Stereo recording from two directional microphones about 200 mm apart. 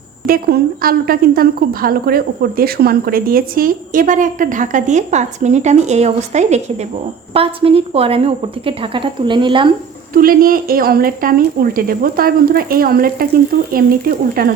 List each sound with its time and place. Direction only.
0.3 s a woman's voice: 45° right (ahead or behind); by 9.7 s 25° right (ahead or behind)
10.2 s a woman's voice: 45° right (ahead or behind)